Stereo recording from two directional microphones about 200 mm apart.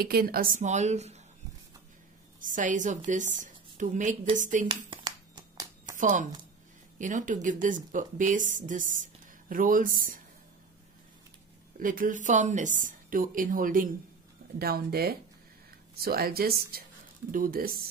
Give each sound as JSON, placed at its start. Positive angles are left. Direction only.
{"t": 0.0, "sound": "a woman's voice", "side_deg": -50}
{"t": 2.4, "sound": "a woman's voice", "side_deg": -40}
{"t": 4.8, "sound": "a sound", "side_deg": -25}
{"t": 5.9, "sound": "a woman's voice", "side_deg": -40}
{"t": 11.8, "sound": "a woman's voice", "side_deg": -45}